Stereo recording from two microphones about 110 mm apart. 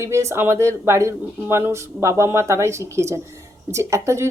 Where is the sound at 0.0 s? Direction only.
25° right (ahead or behind).